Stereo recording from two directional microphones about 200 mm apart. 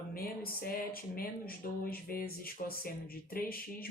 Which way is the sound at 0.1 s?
45° left (ahead or behind).